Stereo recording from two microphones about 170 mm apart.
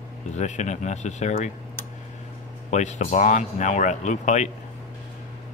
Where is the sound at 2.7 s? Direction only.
45° left (ahead or behind).